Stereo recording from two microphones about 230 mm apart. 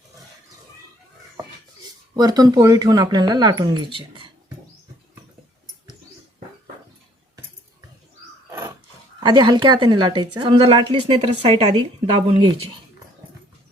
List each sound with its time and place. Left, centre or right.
2.1 s speech: centre
8.4 s a sound: centre
9.2 s a woman's voice: centre